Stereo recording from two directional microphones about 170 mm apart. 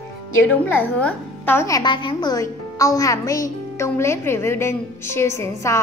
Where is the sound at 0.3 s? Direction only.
15° left (ahead or behind).